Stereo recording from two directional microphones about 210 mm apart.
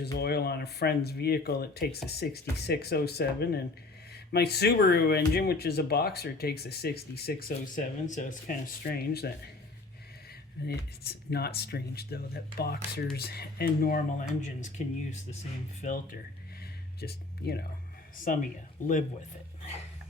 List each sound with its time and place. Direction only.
0.0 s speech: 50° left (ahead or behind)
10.7 s speech: 50° left (ahead or behind)
17.0 s speech: 50° left (ahead or behind)